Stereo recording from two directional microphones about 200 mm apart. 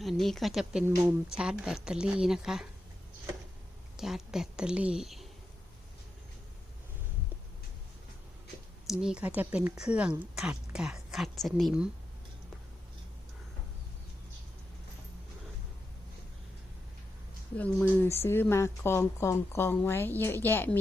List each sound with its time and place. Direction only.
0.0 s speech: centre (ahead or behind)
3.9 s speech: centre (ahead or behind)
8.9 s speech: 5° right (ahead or behind)
17.6 s speech: 10° left (ahead or behind)